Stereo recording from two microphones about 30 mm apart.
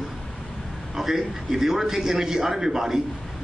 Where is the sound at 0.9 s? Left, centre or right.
Centre.